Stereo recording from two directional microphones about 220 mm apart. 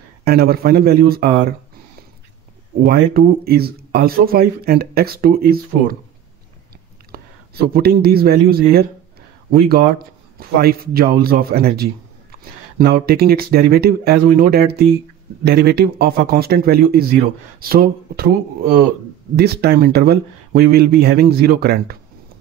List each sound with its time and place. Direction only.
0.2 s speech: 45° right (ahead or behind)
2.8 s speech: 45° right (ahead or behind)
7.1 s speech: 45° right (ahead or behind)
19.3 s speech: 45° right (ahead or behind)